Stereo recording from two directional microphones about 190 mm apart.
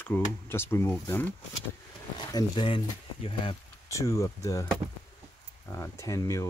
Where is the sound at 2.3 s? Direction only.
25° left (ahead or behind).